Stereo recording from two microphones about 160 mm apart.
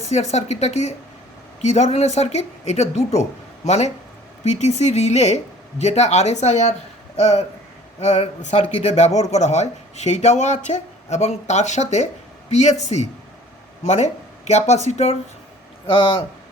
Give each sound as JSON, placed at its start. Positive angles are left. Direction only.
{"t": 0.0, "sound": "speech", "side_deg": 45}
{"t": 15.9, "sound": "speech", "side_deg": 35}